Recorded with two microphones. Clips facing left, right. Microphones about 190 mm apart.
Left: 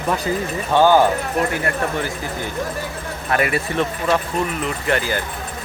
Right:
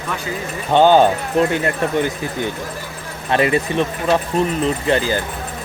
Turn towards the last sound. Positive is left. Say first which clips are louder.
# right 3 dB
turn(degrees=-20)  # may be behind; listen again after turning